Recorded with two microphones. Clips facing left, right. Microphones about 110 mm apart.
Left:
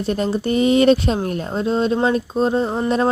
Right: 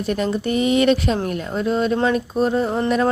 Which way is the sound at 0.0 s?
30° left (ahead or behind).